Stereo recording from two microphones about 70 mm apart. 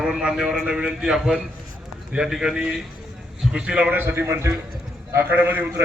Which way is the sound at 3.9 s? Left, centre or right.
Right.